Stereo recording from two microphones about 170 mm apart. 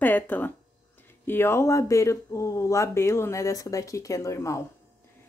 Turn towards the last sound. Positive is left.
turn(degrees=20)  # may be behind; listen again after turning